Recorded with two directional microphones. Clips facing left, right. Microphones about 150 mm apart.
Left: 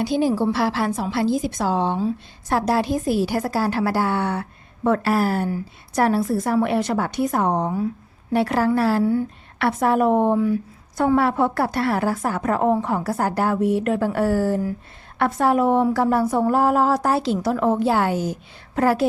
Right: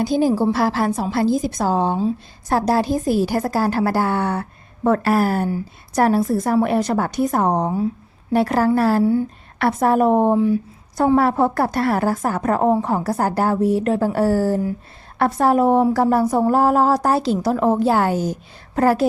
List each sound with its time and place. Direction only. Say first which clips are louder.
0.0 s a woman's voice: right 3 dB; 40° right (ahead or behind)
10.3 s speech: right 3 dB; 25° right (ahead or behind)
10.9 s speech: right 2 dB; 35° right (ahead or behind)